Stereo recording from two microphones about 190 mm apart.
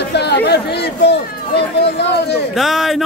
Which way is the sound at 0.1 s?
60° left (ahead or behind).